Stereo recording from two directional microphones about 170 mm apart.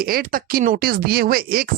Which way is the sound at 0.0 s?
60° right (ahead or behind).